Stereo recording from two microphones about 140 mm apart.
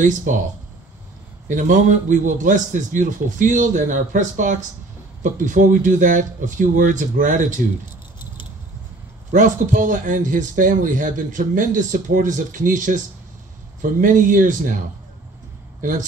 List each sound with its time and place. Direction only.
0.0 s a man's voice: 65° right (ahead or behind)
1.5 s a man's voice: 60° right (ahead or behind)
9.3 s speech: 70° right (ahead or behind)
14.0 s speech: 70° right (ahead or behind)
15.8 s speech: 70° right (ahead or behind)